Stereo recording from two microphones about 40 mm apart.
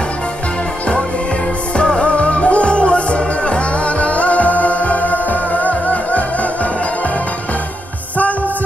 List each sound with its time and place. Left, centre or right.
1.8 s music: left